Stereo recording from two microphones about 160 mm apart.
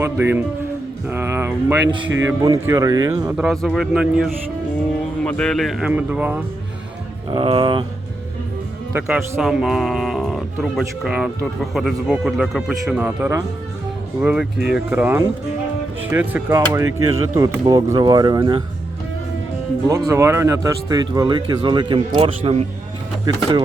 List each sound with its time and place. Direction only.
0.0 s speech: 15° right (ahead or behind)
1.9 s speech: 25° right (ahead or behind)
3.3 s speech: centre (ahead or behind)
7.3 s speech: 35° right (ahead or behind)
8.9 s speech: 10° right (ahead or behind); by 18.6 s 25° right (ahead or behind)
20.1 s speech: 15° right (ahead or behind); by 22.6 s 35° right (ahead or behind)
23.2 s speech: 25° right (ahead or behind)